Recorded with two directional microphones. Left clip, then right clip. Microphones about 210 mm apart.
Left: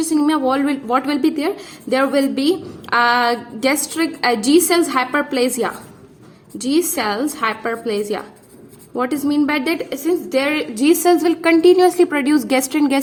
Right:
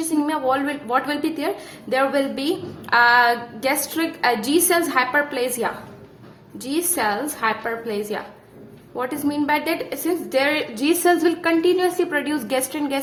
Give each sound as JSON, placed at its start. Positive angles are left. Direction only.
{"t": 0.0, "sound": "a woman's voice", "side_deg": 35}